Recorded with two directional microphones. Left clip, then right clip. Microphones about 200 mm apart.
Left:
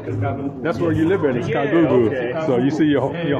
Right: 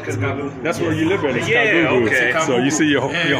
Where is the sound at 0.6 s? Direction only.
15° left (ahead or behind).